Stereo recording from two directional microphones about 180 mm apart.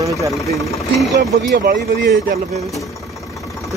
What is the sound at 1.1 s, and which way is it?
Speech, 65° right (ahead or behind).